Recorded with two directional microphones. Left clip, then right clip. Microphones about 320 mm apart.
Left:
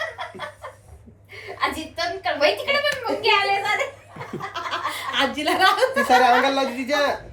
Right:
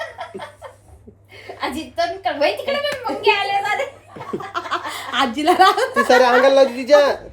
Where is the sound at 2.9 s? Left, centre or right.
Right.